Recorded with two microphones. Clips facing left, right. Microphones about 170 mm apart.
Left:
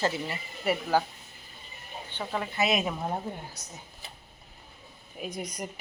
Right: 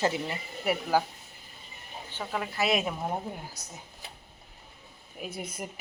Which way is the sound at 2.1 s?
5° right (ahead or behind).